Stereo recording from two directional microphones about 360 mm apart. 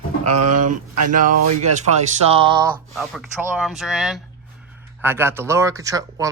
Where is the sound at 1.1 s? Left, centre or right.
Right.